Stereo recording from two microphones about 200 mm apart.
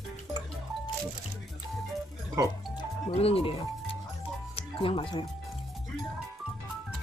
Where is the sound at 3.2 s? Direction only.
30° left (ahead or behind).